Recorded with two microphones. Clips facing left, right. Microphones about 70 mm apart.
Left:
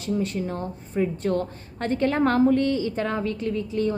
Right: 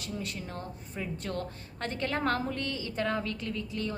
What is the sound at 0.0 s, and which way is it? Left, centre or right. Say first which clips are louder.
A woman's voice: left 12 dB; left.